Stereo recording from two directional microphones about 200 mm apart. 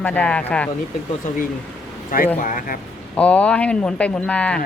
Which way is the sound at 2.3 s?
40° left (ahead or behind).